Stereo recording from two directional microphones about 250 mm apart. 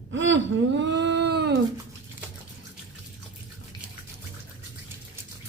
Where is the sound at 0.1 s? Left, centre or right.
Right.